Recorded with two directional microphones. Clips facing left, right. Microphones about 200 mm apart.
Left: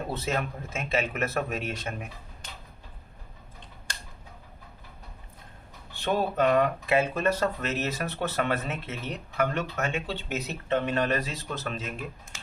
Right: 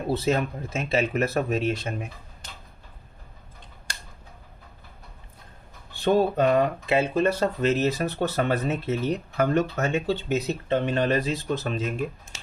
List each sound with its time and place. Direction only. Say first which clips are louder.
0.1 s speech: right 9 dB; 35° right (ahead or behind)
6.1 s speech: right 4 dB; 35° right (ahead or behind)